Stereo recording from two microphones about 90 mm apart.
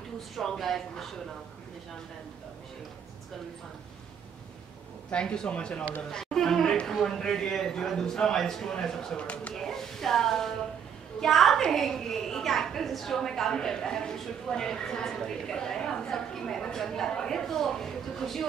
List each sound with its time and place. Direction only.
0.4 s a woman's voice: 5° left (ahead or behind)
5.1 s a woman's voice: 10° left (ahead or behind)